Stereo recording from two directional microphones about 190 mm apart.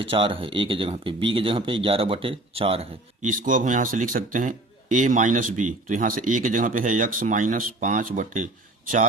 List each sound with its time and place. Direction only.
0.0 s speech: 30° right (ahead or behind)